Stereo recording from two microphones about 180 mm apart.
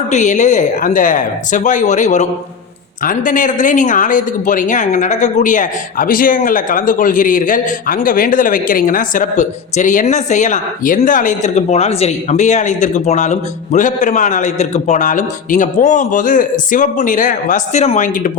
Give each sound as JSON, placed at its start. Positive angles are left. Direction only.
{"t": 0.1, "sound": "speech", "side_deg": 40}